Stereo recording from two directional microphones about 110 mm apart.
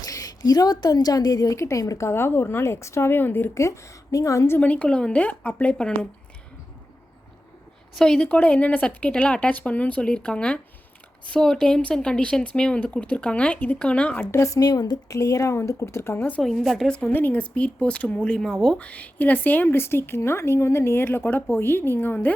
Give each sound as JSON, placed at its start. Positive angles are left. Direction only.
{"t": 0.0, "sound": "a woman's voice", "side_deg": 35}
{"t": 7.9, "sound": "speech", "side_deg": 5}
{"t": 14.3, "sound": "a woman's voice", "side_deg": 25}
{"t": 16.4, "sound": "a woman's voice", "side_deg": 0}